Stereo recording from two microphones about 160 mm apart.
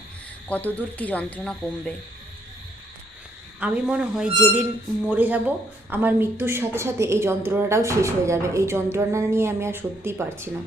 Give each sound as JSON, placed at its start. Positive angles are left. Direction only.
{"t": 0.4, "sound": "speech", "side_deg": 10}
{"t": 3.6, "sound": "a woman's voice", "side_deg": -10}